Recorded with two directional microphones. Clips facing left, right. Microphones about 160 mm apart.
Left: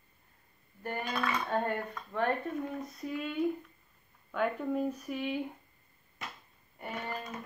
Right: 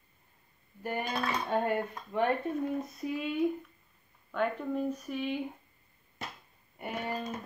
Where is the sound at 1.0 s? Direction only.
35° right (ahead or behind).